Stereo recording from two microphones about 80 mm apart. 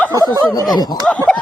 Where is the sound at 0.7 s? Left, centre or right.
Left.